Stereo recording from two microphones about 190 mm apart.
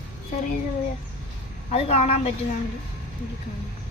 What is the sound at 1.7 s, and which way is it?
Speech, 30° left (ahead or behind).